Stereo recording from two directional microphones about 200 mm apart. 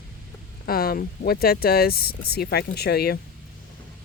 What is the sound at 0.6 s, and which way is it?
Speech, 50° left (ahead or behind).